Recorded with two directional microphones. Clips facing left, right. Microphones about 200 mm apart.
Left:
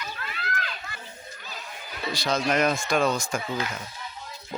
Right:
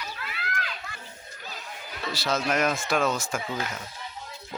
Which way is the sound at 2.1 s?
5° right (ahead or behind).